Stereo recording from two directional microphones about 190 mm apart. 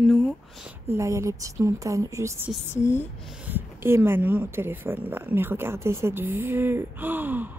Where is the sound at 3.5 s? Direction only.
10° right (ahead or behind).